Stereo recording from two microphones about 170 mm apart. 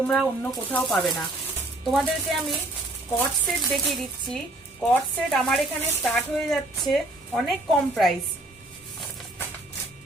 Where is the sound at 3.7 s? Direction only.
Centre (ahead or behind).